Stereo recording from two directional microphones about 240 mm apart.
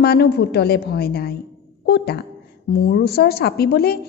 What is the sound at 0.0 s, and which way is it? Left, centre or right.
A woman's voice, left.